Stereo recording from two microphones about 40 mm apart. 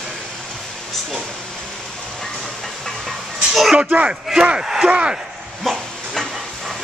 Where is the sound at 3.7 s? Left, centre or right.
Right.